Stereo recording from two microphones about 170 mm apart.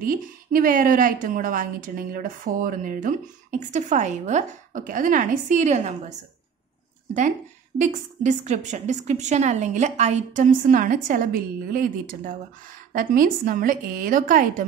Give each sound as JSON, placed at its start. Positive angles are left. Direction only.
{"t": 0.0, "sound": "a woman's voice", "side_deg": -55}
{"t": 7.8, "sound": "a woman's voice", "side_deg": -45}